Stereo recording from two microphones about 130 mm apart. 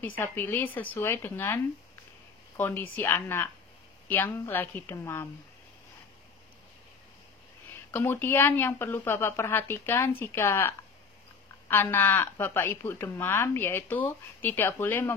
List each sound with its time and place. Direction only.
0.0 s a woman's voice: 15° left (ahead or behind)
7.9 s a woman's voice: 15° left (ahead or behind)
11.7 s a woman's voice: 15° left (ahead or behind)